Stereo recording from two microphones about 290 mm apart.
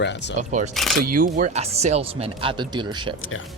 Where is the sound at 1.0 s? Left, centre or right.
Right.